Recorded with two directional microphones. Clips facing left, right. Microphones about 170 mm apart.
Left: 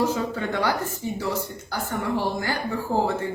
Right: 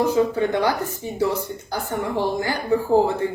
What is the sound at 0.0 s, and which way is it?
Speech, 15° right (ahead or behind).